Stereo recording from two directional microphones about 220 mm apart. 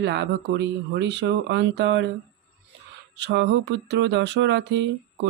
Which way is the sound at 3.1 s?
50° right (ahead or behind).